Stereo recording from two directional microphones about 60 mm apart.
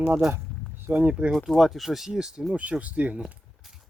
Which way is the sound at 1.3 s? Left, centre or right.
Centre.